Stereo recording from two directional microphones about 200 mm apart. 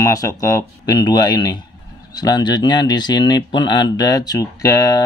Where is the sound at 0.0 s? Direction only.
15° left (ahead or behind).